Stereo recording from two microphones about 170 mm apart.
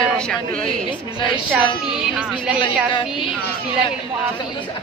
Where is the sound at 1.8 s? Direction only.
5° right (ahead or behind).